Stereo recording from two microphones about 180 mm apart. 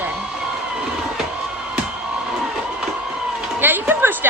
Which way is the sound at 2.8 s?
5° right (ahead or behind).